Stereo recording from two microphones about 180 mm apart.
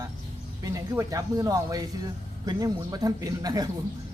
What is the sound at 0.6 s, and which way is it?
Speech, 20° right (ahead or behind).